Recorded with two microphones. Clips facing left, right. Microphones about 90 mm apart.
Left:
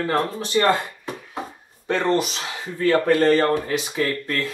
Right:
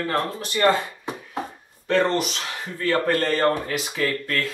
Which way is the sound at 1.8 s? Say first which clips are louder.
Even; 20° left (ahead or behind).